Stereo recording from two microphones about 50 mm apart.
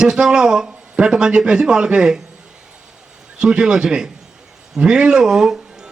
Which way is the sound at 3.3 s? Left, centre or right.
Centre.